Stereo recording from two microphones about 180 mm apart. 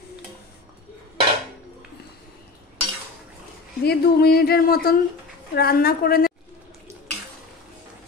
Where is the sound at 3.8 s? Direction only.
60° left (ahead or behind).